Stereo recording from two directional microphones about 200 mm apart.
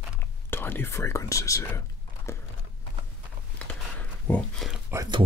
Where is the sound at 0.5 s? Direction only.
10° left (ahead or behind).